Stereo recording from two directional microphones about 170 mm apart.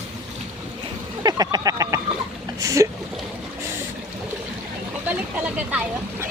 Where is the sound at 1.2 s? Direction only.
20° right (ahead or behind).